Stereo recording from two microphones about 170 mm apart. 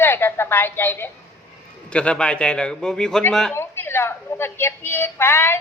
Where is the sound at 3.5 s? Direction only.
15° left (ahead or behind).